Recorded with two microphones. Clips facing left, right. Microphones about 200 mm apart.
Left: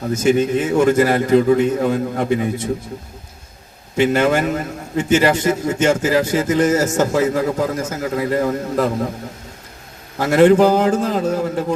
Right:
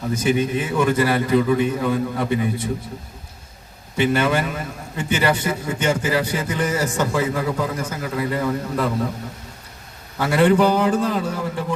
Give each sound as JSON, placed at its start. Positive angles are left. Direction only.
{"t": 0.1, "sound": "a man's voice", "side_deg": 45}
{"t": 4.0, "sound": "a man's voice", "side_deg": 45}
{"t": 10.2, "sound": "a man's voice", "side_deg": 45}